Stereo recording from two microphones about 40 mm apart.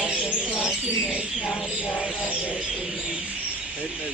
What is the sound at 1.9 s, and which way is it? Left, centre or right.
Speech, left.